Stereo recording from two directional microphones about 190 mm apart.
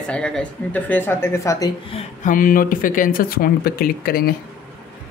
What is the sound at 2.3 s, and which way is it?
Speech, 45° left (ahead or behind).